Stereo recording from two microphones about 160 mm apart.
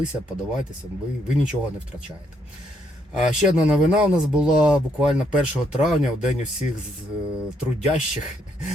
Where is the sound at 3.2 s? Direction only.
5° right (ahead or behind).